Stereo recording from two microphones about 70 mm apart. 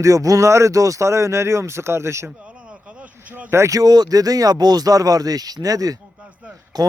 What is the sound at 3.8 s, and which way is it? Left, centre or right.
Speech, right.